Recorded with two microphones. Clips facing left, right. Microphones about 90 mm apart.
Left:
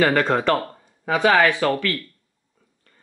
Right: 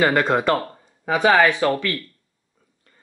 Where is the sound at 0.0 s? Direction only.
10° right (ahead or behind).